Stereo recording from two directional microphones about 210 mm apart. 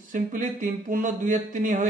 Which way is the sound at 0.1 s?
40° right (ahead or behind).